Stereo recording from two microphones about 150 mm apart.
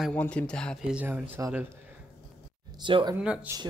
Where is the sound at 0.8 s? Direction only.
10° right (ahead or behind).